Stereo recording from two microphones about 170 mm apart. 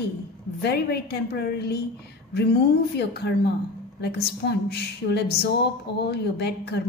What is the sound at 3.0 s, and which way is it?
A woman's voice, 75° left (ahead or behind).